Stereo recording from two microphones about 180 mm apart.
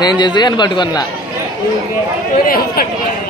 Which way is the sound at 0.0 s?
25° left (ahead or behind).